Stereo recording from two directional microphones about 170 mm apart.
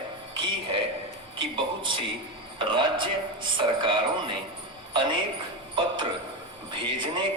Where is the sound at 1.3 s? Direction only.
30° right (ahead or behind).